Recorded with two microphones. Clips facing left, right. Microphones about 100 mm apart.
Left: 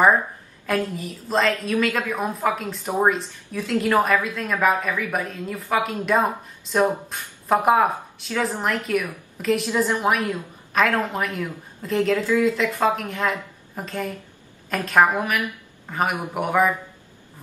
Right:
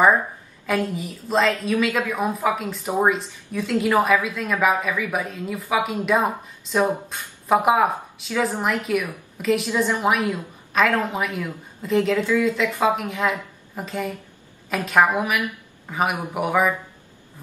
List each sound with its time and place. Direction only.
0.7 s a woman's voice: centre (ahead or behind)